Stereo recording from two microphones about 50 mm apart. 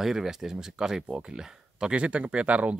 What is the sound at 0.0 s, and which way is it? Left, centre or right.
Speech, centre.